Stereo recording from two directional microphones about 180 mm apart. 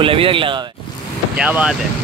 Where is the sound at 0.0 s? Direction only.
30° right (ahead or behind).